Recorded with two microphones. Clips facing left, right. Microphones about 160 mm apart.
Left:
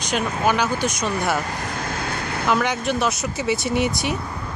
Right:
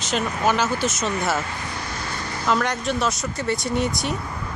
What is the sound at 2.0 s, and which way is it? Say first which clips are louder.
Vehicle: left 1 dB; 60° left (ahead or behind).